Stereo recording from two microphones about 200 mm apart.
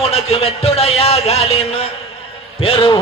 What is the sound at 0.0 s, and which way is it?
A man's voice, 30° left (ahead or behind).